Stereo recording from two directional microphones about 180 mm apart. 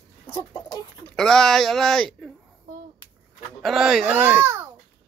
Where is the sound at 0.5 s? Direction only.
20° left (ahead or behind).